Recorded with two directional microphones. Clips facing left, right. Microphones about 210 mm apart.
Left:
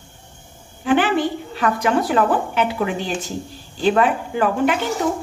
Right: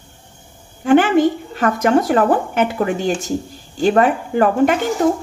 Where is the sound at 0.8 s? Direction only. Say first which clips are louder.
Right 5 dB; 45° right (ahead or behind).